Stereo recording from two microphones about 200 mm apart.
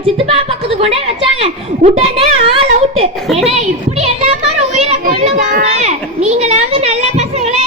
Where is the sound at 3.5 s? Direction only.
35° right (ahead or behind).